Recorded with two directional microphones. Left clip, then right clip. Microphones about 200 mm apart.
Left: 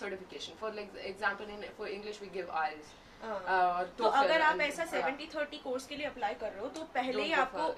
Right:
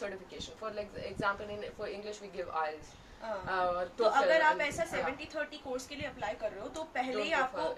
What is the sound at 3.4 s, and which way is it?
Speech, 15° right (ahead or behind).